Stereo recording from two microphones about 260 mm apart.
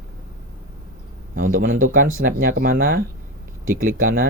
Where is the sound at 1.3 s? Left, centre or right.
Right.